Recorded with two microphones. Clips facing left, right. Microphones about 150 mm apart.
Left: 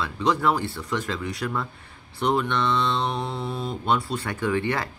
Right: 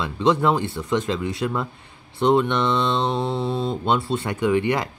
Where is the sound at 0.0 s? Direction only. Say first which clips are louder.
Right 4 dB; 20° right (ahead or behind).